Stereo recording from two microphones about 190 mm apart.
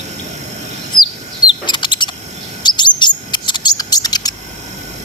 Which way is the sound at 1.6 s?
25° left (ahead or behind).